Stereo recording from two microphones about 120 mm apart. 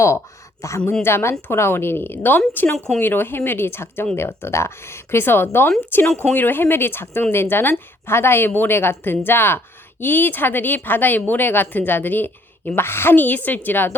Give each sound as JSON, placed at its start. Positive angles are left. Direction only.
{"t": 0.6, "sound": "a woman's voice", "side_deg": 25}